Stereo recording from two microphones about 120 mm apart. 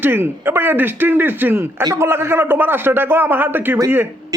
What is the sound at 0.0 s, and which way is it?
A man's voice, 15° right (ahead or behind).